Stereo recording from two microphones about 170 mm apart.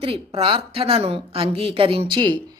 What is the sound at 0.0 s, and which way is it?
A woman's voice, 35° right (ahead or behind).